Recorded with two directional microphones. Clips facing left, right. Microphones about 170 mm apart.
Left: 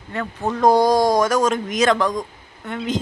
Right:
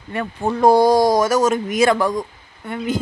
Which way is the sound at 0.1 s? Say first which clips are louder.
Right 2 dB; 10° right (ahead or behind).